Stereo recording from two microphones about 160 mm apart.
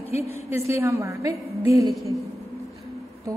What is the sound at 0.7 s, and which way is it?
A woman's voice, 20° right (ahead or behind).